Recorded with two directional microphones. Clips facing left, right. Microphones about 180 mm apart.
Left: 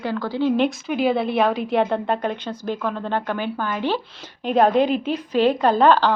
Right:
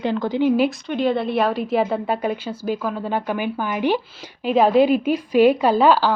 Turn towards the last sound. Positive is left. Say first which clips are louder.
# even
turn(degrees=-5)  # may be behind; listen again after turning